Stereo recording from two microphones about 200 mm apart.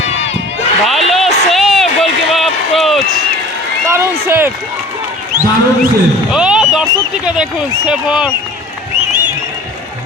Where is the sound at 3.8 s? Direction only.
15° right (ahead or behind).